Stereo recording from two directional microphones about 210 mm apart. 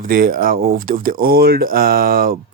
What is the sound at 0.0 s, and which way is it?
Speech, 45° right (ahead or behind).